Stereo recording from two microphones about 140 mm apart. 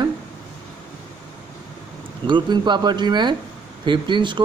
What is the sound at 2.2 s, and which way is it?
Speech, 35° right (ahead or behind).